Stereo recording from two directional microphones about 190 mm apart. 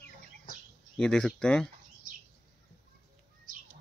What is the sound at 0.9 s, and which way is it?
Speech, 5° left (ahead or behind).